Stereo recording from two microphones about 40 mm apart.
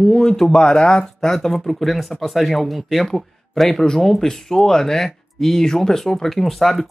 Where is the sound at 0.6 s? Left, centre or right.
Left.